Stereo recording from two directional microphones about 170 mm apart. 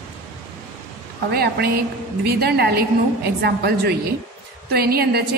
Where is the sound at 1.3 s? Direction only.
65° right (ahead or behind).